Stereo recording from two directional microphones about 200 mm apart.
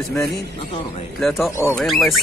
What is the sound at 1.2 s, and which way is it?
Speech, centre (ahead or behind).